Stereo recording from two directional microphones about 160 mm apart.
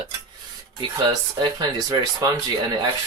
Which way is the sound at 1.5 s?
25° right (ahead or behind).